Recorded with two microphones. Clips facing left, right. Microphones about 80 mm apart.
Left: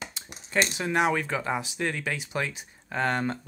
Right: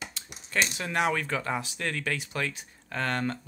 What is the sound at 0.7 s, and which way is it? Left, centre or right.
Speech, centre.